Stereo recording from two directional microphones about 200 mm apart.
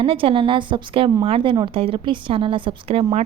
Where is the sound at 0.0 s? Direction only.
25° right (ahead or behind).